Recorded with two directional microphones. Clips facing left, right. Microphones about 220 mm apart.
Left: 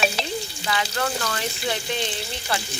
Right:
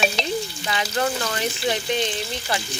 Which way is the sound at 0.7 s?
20° right (ahead or behind).